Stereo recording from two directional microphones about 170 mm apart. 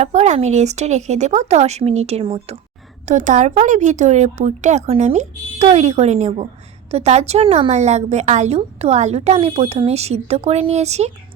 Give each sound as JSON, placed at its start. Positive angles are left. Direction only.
{"t": 0.0, "sound": "a woman's voice", "side_deg": -40}
{"t": 3.1, "sound": "a woman's voice", "side_deg": -50}